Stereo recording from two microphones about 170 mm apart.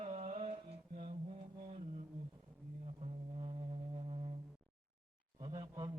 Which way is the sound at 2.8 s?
35° right (ahead or behind).